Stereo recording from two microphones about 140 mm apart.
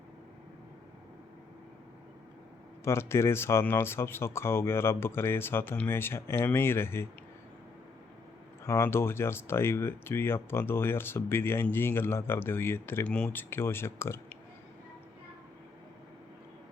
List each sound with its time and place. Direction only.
2.8 s speech: 20° left (ahead or behind)
8.6 s speech: 20° left (ahead or behind)